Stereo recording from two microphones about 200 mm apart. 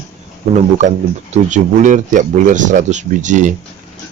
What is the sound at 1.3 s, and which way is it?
Speech, 40° right (ahead or behind).